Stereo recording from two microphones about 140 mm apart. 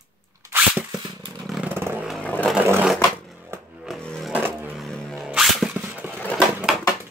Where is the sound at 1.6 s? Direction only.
15° right (ahead or behind).